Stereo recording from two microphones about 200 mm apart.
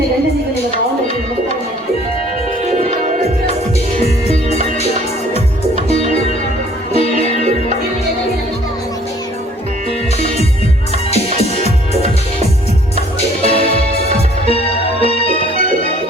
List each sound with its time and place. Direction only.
2.6 s music: 35° right (ahead or behind)
4.0 s music: 30° left (ahead or behind)
11.1 s music: 30° left (ahead or behind)
13.4 s music: 30° left (ahead or behind)
15.0 s music: 30° left (ahead or behind)